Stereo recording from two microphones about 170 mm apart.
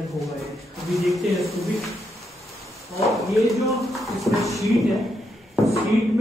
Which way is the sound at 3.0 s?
Centre (ahead or behind).